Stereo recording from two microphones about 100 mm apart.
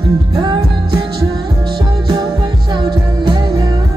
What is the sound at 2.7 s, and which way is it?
Music, 45° right (ahead or behind).